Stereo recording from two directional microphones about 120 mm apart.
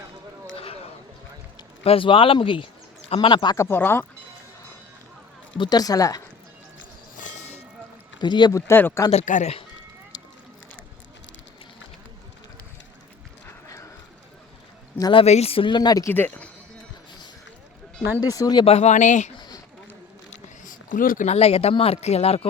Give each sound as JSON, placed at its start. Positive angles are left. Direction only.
{"t": 1.8, "sound": "speech", "side_deg": 50}
{"t": 3.6, "sound": "speech", "side_deg": 20}
{"t": 5.5, "sound": "speech", "side_deg": 35}
{"t": 7.2, "sound": "a sound", "side_deg": 85}
{"t": 8.2, "sound": "speech", "side_deg": 40}
{"t": 8.5, "sound": "speech", "side_deg": 20}
{"t": 9.1, "sound": "speech", "side_deg": 80}
{"t": 15.1, "sound": "speech", "side_deg": 60}
{"t": 16.0, "sound": "speech", "side_deg": 15}
{"t": 18.2, "sound": "speech", "side_deg": 30}
{"t": 18.6, "sound": "speech", "side_deg": 65}
{"t": 19.4, "sound": "a sound", "side_deg": 35}
{"t": 20.3, "sound": "speech", "side_deg": 90}